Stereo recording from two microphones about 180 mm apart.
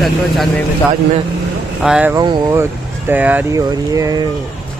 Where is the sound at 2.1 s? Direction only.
25° right (ahead or behind).